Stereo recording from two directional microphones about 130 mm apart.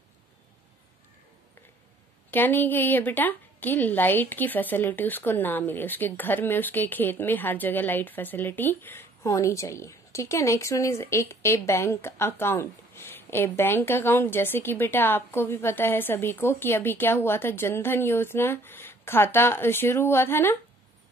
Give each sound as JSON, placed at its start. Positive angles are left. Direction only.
{"t": 2.3, "sound": "a woman's voice", "side_deg": 15}